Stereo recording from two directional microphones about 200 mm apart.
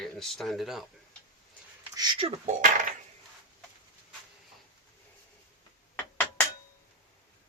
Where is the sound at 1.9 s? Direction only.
25° right (ahead or behind).